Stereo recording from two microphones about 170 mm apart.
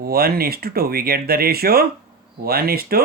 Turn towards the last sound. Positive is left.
turn(degrees=-65)  # may be behind; listen again after turning